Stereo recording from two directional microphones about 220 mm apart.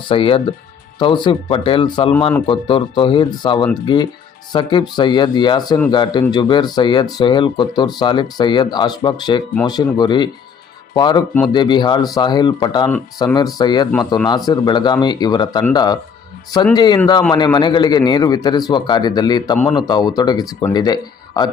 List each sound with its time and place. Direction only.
0.1 s speech: 25° left (ahead or behind)